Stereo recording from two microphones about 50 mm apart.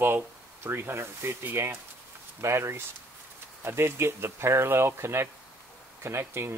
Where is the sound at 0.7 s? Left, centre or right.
Right.